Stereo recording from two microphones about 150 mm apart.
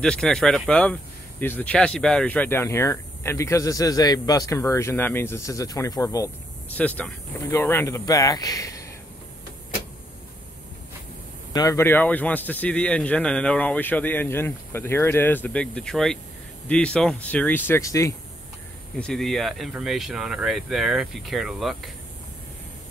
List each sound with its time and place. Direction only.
0.0 s speech: 5° left (ahead or behind); by 8.8 s 20° left (ahead or behind)
11.5 s speech: 20° left (ahead or behind)
18.9 s speech: 5° left (ahead or behind)